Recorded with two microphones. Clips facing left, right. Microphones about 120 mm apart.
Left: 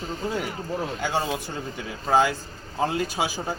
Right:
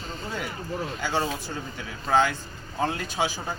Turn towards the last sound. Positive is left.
turn(degrees=10)  # may be behind; listen again after turning